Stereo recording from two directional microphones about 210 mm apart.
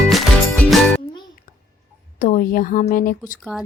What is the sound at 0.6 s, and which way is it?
Music, centre (ahead or behind).